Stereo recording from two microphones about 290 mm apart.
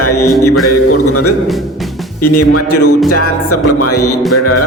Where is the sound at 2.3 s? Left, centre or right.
Left.